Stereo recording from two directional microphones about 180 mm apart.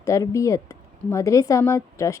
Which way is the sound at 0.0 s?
15° left (ahead or behind).